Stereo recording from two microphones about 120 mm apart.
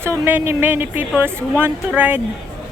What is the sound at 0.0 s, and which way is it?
Speech, 20° right (ahead or behind).